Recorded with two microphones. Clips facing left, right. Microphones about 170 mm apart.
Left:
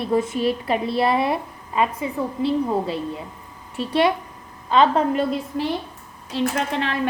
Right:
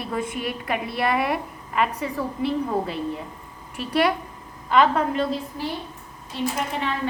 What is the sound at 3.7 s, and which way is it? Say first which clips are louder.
A woman's voice: left 2 dB; 25° left (ahead or behind).